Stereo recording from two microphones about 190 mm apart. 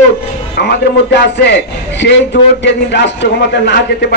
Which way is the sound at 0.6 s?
60° left (ahead or behind).